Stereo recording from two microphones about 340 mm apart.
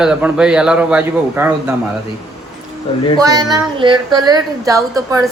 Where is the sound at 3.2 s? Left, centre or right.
Centre.